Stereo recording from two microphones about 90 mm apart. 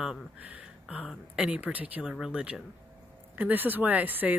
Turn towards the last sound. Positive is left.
turn(degrees=-20)  # may be behind; listen again after turning